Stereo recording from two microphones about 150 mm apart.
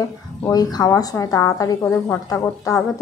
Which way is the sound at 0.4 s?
25° left (ahead or behind).